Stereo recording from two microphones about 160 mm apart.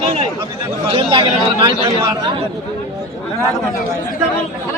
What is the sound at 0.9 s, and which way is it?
A man's voice, 35° right (ahead or behind).